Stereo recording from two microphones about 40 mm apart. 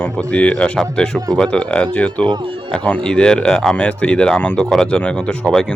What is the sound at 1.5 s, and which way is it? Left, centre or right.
Speech, left.